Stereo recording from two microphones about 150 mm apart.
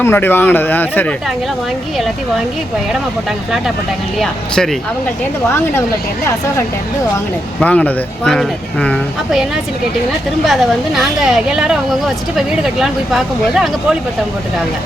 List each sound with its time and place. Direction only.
0.0 s speech: 15° left (ahead or behind)
4.2 s speech: 5° left (ahead or behind)
5.5 s speech: 15° left (ahead or behind)
7.6 s speech: 10° left (ahead or behind)
10.4 s speech: centre (ahead or behind)